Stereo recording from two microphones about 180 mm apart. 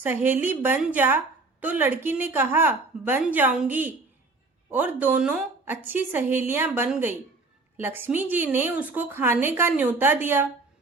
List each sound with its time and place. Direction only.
0.0 s a woman's voice: 10° right (ahead or behind)